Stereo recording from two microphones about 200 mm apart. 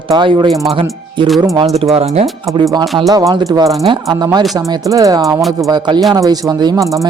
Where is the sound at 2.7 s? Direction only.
20° right (ahead or behind).